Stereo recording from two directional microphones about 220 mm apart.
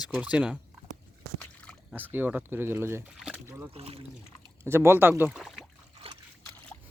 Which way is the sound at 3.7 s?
25° right (ahead or behind).